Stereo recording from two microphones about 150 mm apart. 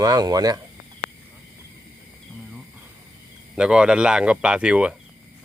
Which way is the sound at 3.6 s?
5° right (ahead or behind).